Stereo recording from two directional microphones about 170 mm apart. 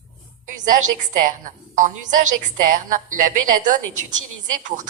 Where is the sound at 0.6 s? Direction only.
50° right (ahead or behind).